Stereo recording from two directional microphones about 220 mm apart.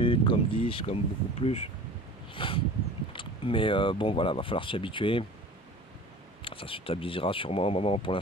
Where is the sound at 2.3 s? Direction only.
25° left (ahead or behind).